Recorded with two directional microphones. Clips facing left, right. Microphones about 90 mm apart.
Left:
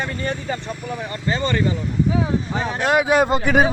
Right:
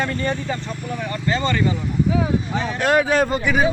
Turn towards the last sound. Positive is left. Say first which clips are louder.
# left 3 dB
turn(degrees=45)  # may be behind; listen again after turning